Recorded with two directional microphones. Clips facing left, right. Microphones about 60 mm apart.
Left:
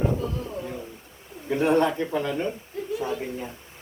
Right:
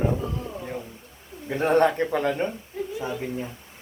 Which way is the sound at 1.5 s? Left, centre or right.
Right.